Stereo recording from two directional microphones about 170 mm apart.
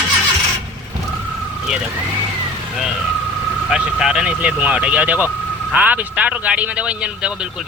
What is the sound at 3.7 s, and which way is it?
A man's voice, 5° right (ahead or behind).